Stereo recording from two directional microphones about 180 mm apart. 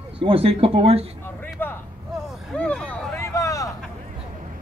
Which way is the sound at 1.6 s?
10° left (ahead or behind).